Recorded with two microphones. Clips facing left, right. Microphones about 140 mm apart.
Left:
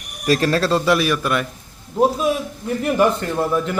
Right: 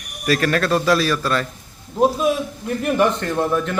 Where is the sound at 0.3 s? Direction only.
30° left (ahead or behind); by 1.5 s 15° left (ahead or behind).